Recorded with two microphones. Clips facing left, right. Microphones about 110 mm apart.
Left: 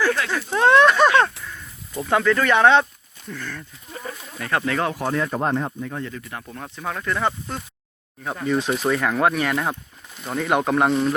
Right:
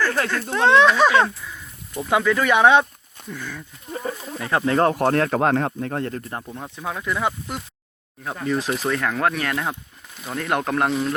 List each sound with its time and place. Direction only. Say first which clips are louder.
0.5 s speech: left 1 dB; centre (ahead or behind)
4.2 s speech: even; 25° right (ahead or behind)
4.8 s speech: right 5 dB; 50° right (ahead or behind)
6.5 s speech: left 2 dB; 10° right (ahead or behind)